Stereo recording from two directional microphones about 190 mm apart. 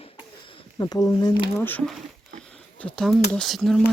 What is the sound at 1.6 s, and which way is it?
Speech, 10° left (ahead or behind).